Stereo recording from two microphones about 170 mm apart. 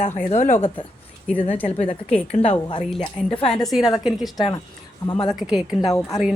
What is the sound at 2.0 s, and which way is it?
Speech, 5° left (ahead or behind).